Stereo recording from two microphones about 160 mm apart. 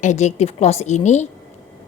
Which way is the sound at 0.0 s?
50° left (ahead or behind).